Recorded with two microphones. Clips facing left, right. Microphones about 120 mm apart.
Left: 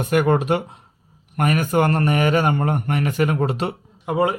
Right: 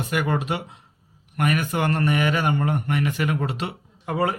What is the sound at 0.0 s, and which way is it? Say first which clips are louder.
A man's voice: left 7 dB; 45° left (ahead or behind).